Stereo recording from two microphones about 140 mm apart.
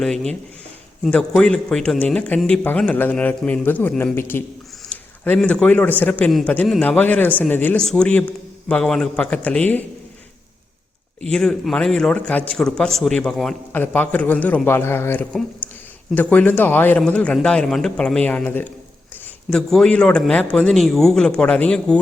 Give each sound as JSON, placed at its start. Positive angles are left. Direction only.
{"t": 0.0, "sound": "a man's voice", "side_deg": 5}
{"t": 11.2, "sound": "a man's voice", "side_deg": 5}
{"t": 15.6, "sound": "a sound", "side_deg": 10}
{"t": 16.1, "sound": "a man's voice", "side_deg": 10}